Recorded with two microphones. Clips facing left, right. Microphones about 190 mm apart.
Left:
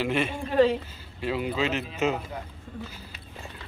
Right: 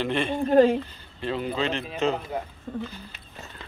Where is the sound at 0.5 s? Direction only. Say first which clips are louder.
Right 4 dB; 45° right (ahead or behind).